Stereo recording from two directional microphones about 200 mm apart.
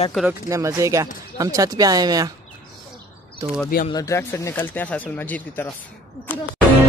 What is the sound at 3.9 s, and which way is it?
Speech, 15° left (ahead or behind).